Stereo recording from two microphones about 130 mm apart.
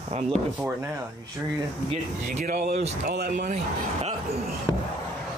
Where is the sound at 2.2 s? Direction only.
80° right; by 3.5 s 65° right (ahead or behind).